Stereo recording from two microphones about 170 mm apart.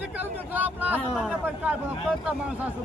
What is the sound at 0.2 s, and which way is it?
Vehicle, 10° right (ahead or behind).